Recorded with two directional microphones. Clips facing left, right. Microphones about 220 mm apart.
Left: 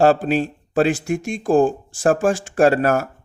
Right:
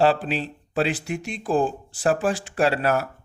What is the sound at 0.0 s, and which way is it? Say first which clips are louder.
Speech: left 5 dB; 45° left (ahead or behind).